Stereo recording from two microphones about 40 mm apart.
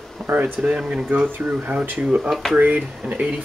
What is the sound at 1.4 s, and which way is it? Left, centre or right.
Speech, right.